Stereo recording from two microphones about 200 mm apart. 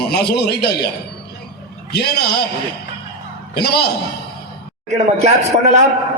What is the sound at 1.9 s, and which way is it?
Speech, 50° left (ahead or behind).